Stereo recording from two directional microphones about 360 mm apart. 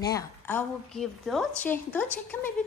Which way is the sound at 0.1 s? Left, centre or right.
Centre.